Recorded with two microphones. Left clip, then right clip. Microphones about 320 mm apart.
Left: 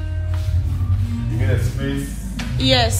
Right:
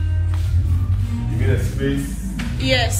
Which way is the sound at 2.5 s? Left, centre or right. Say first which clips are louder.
Left 3 dB; centre.